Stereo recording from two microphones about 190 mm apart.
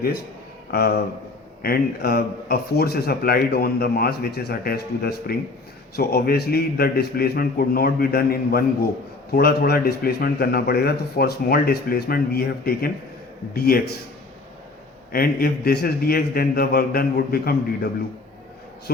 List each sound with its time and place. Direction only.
0.7 s a man's voice: 55° left (ahead or behind)
15.1 s a man's voice: 50° left (ahead or behind)